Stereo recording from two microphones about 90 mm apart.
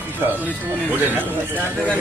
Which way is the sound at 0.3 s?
20° right (ahead or behind).